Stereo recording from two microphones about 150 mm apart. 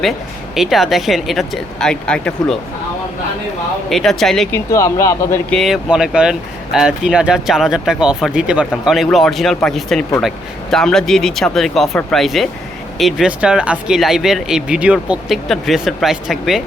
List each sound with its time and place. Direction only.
0.5 s speech: centre (ahead or behind)
3.8 s speech: centre (ahead or behind)
4.5 s speech: 20° left (ahead or behind)
5.5 s speech: centre (ahead or behind)